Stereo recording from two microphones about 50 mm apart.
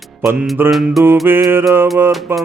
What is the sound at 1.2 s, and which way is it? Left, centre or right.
Music, right.